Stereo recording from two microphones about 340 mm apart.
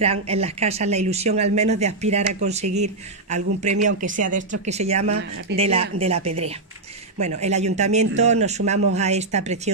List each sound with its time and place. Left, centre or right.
0.0 s speech: centre
7.4 s speech: centre